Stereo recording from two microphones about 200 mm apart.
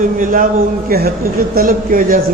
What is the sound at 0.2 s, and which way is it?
A man's voice, 40° right (ahead or behind).